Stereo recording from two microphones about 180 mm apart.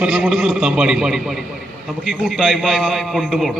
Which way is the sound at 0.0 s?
5° right (ahead or behind).